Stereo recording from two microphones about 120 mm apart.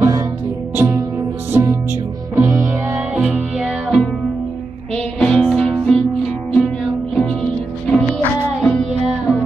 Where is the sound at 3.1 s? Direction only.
5° right (ahead or behind).